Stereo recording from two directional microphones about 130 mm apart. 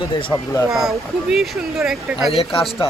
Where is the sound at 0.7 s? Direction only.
Centre (ahead or behind).